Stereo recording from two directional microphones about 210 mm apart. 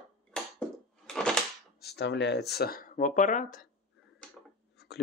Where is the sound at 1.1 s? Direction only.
5° left (ahead or behind).